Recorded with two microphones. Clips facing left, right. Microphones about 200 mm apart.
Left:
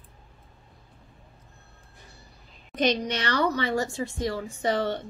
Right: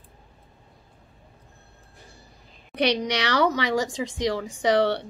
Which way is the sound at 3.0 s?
80° right.